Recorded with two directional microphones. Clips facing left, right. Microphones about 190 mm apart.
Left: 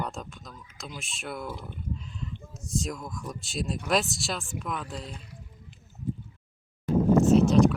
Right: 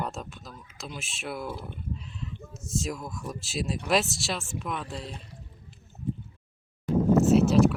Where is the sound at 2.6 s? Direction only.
Centre (ahead or behind).